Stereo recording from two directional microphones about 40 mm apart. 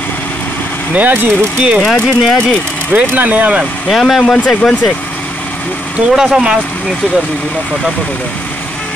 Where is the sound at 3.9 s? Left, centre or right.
Centre.